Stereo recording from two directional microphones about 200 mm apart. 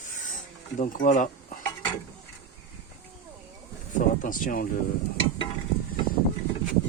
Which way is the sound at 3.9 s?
40° left (ahead or behind).